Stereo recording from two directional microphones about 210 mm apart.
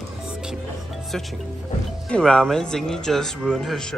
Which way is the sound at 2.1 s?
5° left (ahead or behind).